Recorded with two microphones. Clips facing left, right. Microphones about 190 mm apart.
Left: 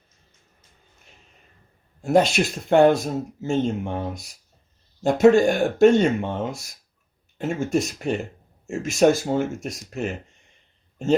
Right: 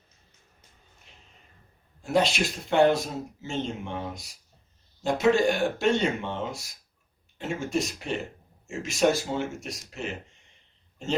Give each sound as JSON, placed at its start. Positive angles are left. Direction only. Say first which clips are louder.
{"t": 2.0, "sound": "a man's voice", "louder": "left 6 dB", "side_deg": 45}